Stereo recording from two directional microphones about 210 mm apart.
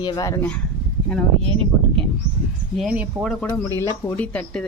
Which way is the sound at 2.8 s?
Centre (ahead or behind).